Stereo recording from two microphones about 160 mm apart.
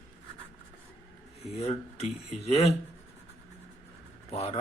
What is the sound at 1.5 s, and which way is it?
Speech, 40° left (ahead or behind).